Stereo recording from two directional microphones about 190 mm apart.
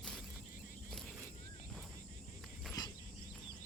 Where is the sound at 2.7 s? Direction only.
20° left (ahead or behind).